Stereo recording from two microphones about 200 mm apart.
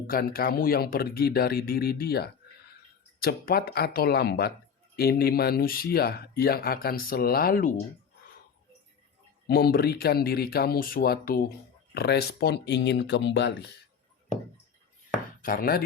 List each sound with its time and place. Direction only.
0.1 s speech: 50° left (ahead or behind)
9.5 s speech: 50° left (ahead or behind)
15.4 s chopping: 45° left (ahead or behind)